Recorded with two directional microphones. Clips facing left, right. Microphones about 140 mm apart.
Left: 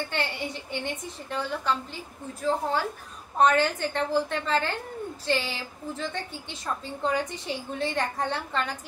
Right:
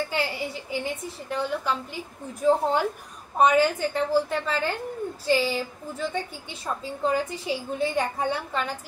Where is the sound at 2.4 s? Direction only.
15° right (ahead or behind).